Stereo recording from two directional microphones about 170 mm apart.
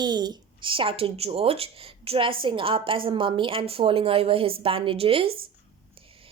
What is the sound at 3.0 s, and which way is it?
A child's voice, 30° right (ahead or behind).